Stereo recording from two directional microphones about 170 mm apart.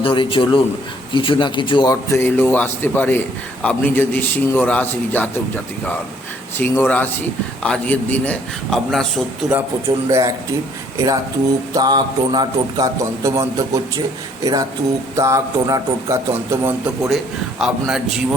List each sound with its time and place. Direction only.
0.0 s a man's voice: 30° left (ahead or behind); by 5.3 s 10° left (ahead or behind)
6.6 s a man's voice: 10° left (ahead or behind)
9.5 s a man's voice: 15° right (ahead or behind)
17.6 s speech: centre (ahead or behind)